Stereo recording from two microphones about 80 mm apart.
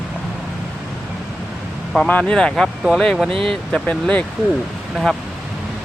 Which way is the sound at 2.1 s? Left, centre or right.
Centre.